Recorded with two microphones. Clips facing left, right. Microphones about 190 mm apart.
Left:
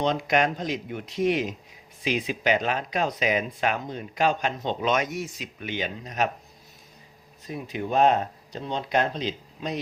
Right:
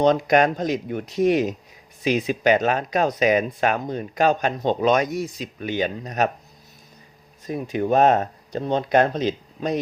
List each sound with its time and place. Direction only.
0.0 s speech: 45° right (ahead or behind)
7.4 s speech: 50° right (ahead or behind)